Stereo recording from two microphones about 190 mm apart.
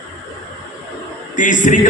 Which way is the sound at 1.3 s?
40° left (ahead or behind).